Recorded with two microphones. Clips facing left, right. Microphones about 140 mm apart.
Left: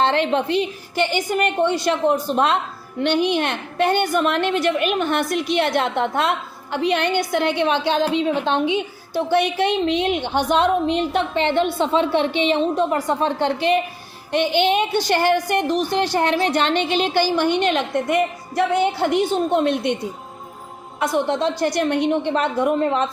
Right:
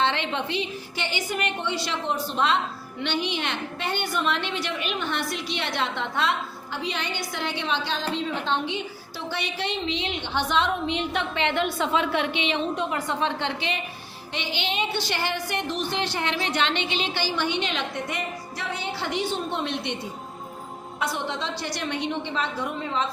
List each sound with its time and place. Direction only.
0.0 s a woman's voice: 45° left (ahead or behind)
21.0 s a woman's voice: 50° left (ahead or behind)